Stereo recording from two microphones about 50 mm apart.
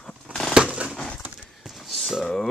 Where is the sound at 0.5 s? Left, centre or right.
Right.